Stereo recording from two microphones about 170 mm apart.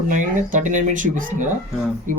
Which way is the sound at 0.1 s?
50° right (ahead or behind).